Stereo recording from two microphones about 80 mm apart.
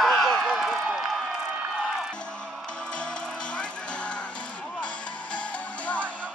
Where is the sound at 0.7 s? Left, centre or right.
Centre.